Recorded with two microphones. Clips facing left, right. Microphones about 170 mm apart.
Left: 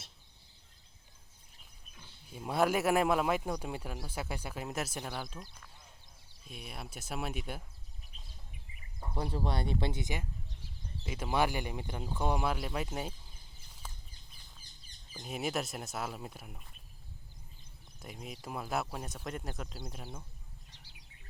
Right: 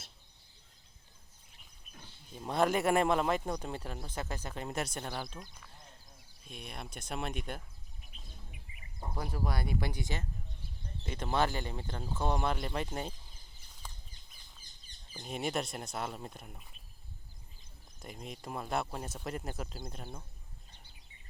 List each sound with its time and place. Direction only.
2.3 s speech: 5° left (ahead or behind)
9.1 s speech: 30° left (ahead or behind); by 13.1 s 5° left (ahead or behind)
13.8 s a sound: 5° left (ahead or behind)
15.2 s speech: 5° left (ahead or behind)
18.0 s speech: centre (ahead or behind)
20.7 s bird: 90° left